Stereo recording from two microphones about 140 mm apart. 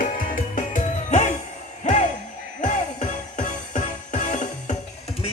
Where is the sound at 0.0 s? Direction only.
85° left; by 4.4 s 60° left (ahead or behind).